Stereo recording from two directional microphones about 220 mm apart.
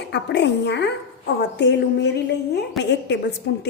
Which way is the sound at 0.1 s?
50° left (ahead or behind).